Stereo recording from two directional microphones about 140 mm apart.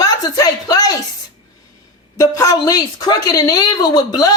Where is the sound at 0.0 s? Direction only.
25° left (ahead or behind).